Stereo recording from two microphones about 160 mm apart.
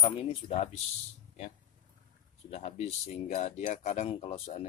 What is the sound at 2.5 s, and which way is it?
Speech, 40° left (ahead or behind).